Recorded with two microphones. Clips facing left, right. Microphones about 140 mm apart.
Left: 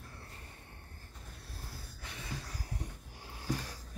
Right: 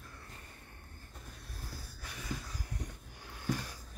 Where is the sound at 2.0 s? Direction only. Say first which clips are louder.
Left 1 dB; 25° left (ahead or behind).